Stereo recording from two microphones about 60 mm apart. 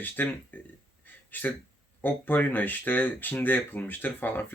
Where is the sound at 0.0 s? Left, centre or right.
Left.